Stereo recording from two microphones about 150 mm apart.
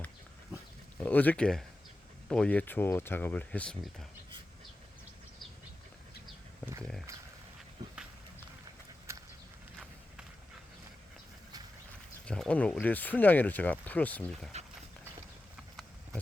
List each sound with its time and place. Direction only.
0.9 s speech: 10° left (ahead or behind)
7.1 s dog: 20° right (ahead or behind)
12.2 s speech: 5° left (ahead or behind)